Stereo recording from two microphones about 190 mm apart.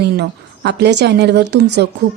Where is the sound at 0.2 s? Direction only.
65° right (ahead or behind).